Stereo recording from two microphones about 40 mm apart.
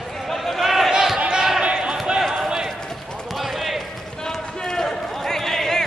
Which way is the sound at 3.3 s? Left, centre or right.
Centre.